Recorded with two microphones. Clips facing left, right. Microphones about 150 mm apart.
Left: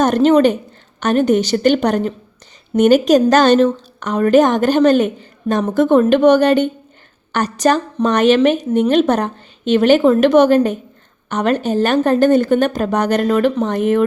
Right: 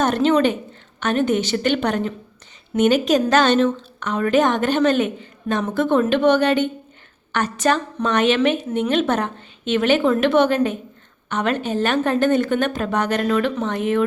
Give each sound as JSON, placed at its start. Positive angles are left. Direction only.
{"t": 0.0, "sound": "a woman's voice", "side_deg": 40}